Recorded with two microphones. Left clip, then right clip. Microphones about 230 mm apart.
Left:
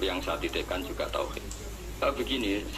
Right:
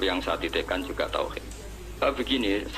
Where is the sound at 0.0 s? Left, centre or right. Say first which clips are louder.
Right 4 dB; right.